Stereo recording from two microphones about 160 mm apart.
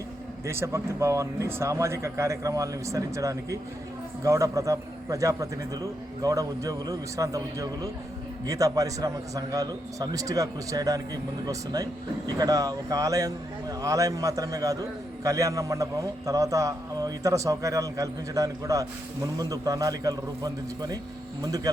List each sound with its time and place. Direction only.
0.4 s a man's voice: 15° right (ahead or behind)